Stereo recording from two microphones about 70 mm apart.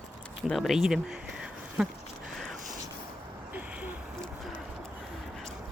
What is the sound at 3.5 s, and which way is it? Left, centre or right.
Vehicle, right.